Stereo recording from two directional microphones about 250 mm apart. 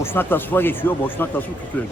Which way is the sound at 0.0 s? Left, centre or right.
Centre.